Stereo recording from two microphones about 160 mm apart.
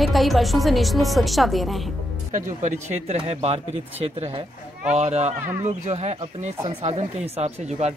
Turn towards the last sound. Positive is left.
turn(degrees=-40)  # may be behind; listen again after turning